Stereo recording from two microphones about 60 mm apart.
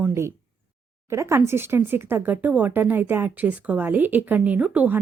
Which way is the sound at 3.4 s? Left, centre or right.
Right.